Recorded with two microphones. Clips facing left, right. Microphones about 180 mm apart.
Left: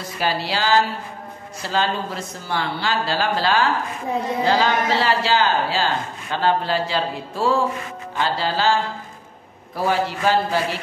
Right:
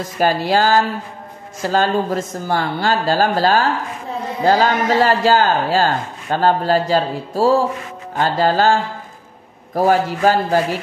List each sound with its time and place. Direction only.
0.0 s a man's voice: 45° right (ahead or behind)